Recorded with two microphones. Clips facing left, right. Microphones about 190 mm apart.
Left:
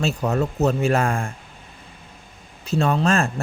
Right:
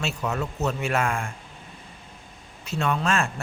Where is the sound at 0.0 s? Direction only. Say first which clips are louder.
Left 6 dB; 35° left (ahead or behind).